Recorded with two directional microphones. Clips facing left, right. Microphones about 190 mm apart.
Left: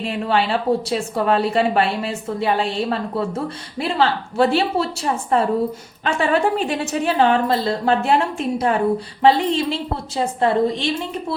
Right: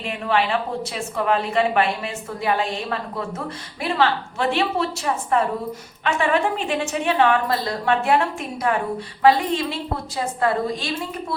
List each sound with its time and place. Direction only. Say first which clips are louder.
0.0 s a woman's voice: left 2 dB; 30° left (ahead or behind)